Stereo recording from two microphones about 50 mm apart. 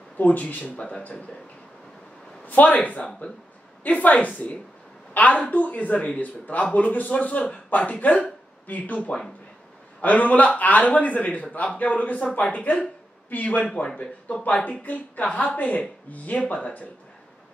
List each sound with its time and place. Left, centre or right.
0.2 s speech: left
2.4 s speech: left